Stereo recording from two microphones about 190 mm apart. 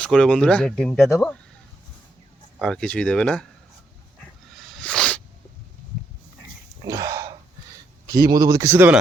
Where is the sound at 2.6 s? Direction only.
5° left (ahead or behind).